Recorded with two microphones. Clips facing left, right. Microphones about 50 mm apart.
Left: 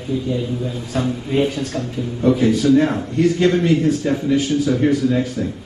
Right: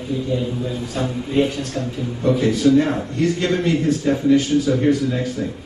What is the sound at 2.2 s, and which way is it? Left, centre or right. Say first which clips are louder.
A man's voice: left 1 dB; centre.